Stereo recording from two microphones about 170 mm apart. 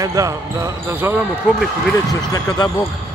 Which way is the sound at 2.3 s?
20° left (ahead or behind).